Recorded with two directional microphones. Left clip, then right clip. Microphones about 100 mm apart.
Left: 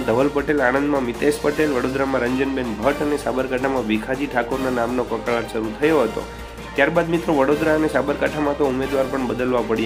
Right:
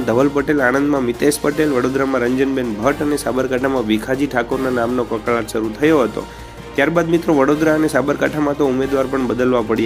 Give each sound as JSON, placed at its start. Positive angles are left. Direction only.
{"t": 0.1, "sound": "speech", "side_deg": -35}
{"t": 0.8, "sound": "speech", "side_deg": -25}
{"t": 1.0, "sound": "speech", "side_deg": -35}
{"t": 4.6, "sound": "speech", "side_deg": -30}
{"t": 5.8, "sound": "speech", "side_deg": -40}